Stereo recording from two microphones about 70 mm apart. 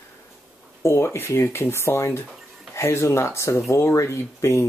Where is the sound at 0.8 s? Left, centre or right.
Left.